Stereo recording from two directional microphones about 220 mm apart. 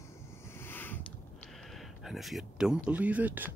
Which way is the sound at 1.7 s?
Centre (ahead or behind).